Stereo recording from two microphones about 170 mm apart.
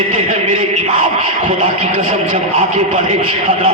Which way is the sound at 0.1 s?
35° right (ahead or behind).